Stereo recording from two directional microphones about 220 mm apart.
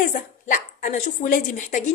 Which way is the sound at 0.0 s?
35° left (ahead or behind).